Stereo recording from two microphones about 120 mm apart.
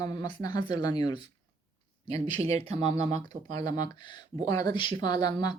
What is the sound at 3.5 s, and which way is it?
Speech, 30° left (ahead or behind).